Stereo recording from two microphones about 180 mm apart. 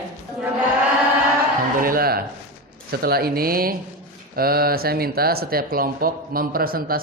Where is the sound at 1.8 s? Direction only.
55° right (ahead or behind).